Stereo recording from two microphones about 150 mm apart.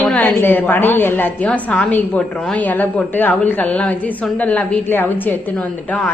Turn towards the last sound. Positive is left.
turn(degrees=10)  # may be behind; listen again after turning